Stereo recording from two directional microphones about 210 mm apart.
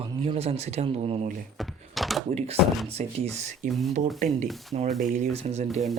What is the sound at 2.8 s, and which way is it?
Speech, 30° right (ahead or behind).